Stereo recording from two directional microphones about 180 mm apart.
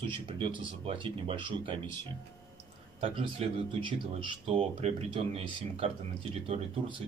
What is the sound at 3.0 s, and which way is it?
Speech, 30° right (ahead or behind).